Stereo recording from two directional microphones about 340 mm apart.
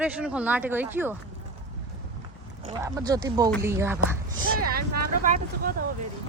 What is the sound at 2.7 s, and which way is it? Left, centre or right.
Speech, centre.